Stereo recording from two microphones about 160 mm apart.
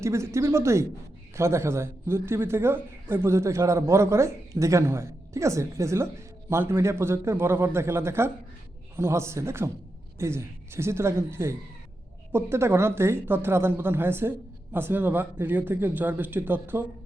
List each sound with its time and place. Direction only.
0.0 s speech: 15° right (ahead or behind)